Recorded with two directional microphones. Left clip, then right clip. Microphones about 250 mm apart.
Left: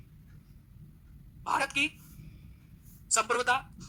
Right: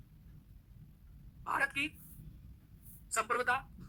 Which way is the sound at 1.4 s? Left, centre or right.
Left.